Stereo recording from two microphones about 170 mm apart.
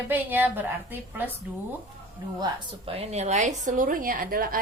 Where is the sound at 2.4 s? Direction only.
35° right (ahead or behind).